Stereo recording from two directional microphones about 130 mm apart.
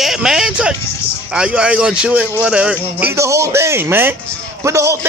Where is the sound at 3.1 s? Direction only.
20° right (ahead or behind).